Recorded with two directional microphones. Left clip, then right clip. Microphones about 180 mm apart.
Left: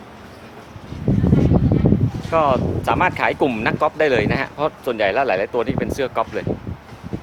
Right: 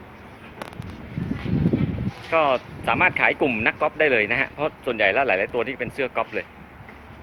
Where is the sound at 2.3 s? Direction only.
20° left (ahead or behind).